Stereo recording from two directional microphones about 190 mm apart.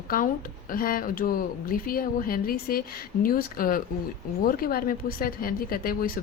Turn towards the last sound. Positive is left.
turn(degrees=50)  # may be behind; listen again after turning